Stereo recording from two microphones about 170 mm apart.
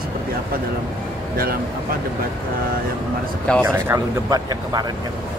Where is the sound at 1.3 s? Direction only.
60° right (ahead or behind).